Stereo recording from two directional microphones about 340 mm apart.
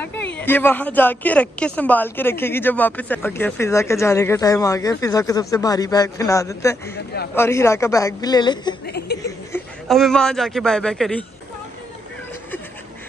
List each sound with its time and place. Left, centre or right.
0.0 s a woman's voice: centre
8.8 s speech: left
9.2 s a man's voice: centre